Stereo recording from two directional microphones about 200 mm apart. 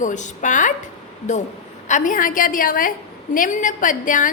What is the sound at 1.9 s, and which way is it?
A woman's voice, 40° left (ahead or behind).